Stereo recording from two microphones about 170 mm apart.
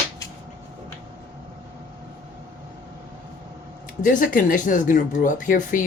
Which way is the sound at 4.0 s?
50° left (ahead or behind).